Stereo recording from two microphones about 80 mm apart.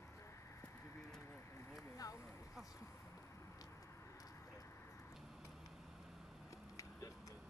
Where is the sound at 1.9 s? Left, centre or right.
Left.